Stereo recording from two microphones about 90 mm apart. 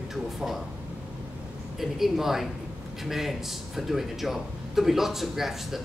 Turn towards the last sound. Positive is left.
turn(degrees=-5)  # may be behind; listen again after turning